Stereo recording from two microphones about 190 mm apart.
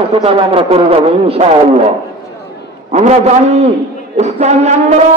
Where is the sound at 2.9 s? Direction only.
35° right (ahead or behind).